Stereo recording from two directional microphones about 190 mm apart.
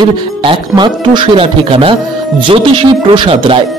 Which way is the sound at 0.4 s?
25° right (ahead or behind).